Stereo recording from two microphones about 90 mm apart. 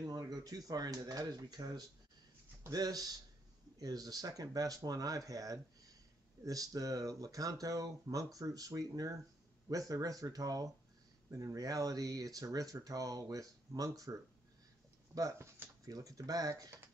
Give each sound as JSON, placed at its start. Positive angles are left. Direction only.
{"t": 0.0, "sound": "speech", "side_deg": -45}
{"t": 15.9, "sound": "speech", "side_deg": -40}